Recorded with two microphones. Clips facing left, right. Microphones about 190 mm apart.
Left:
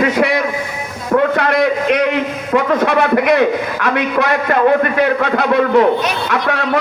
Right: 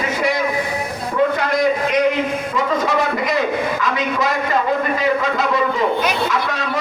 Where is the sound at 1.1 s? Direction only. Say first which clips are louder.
Left 4 dB; 65° left (ahead or behind).